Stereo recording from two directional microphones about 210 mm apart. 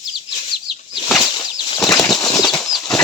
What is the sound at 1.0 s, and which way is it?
Bird flight, centre (ahead or behind).